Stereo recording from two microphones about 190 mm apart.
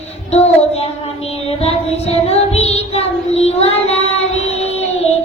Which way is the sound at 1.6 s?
35° left (ahead or behind).